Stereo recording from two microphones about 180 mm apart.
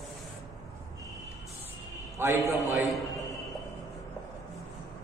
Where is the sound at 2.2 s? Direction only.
15° right (ahead or behind).